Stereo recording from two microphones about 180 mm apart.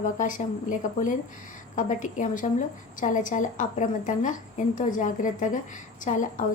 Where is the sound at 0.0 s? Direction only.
45° left (ahead or behind).